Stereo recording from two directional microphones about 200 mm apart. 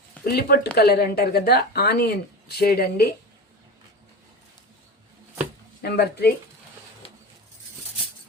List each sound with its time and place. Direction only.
0.3 s speech: 50° left (ahead or behind)
5.8 s speech: 55° left (ahead or behind)
7.0 s a sound: 30° left (ahead or behind)